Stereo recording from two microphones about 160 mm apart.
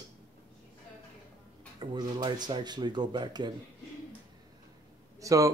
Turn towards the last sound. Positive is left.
turn(degrees=-20)  # may be behind; listen again after turning